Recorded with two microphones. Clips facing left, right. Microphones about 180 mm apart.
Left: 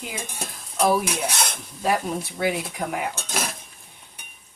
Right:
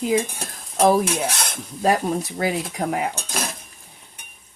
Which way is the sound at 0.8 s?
40° right (ahead or behind).